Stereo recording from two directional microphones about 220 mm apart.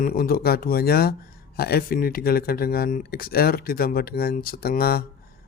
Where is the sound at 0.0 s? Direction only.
45° left (ahead or behind).